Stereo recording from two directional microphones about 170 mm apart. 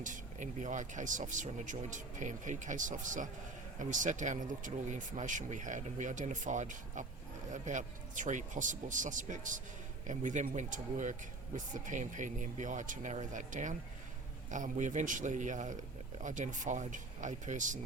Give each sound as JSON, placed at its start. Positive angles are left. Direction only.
{"t": 0.0, "sound": "speech", "side_deg": -50}